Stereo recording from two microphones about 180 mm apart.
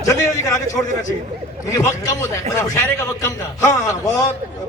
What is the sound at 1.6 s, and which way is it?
A man's voice, 15° left (ahead or behind).